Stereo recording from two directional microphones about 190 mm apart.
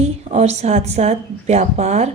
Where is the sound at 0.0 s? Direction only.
35° right (ahead or behind).